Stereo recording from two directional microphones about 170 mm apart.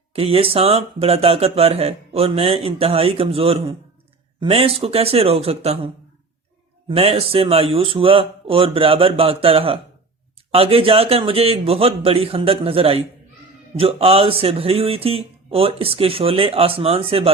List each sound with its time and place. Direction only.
0.1 s speech: 35° right (ahead or behind)